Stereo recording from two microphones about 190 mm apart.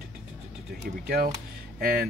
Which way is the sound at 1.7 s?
55° right (ahead or behind).